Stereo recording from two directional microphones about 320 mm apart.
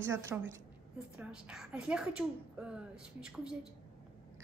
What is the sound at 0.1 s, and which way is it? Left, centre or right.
A woman's voice, centre.